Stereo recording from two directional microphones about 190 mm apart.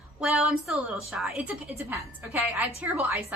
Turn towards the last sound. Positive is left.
turn(degrees=-10)  # may be behind; listen again after turning